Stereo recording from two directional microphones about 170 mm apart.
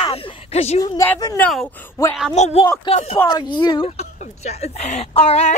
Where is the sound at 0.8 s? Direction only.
20° left (ahead or behind).